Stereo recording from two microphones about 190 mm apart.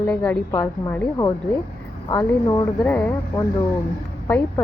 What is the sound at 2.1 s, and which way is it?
Speech, 20° left (ahead or behind).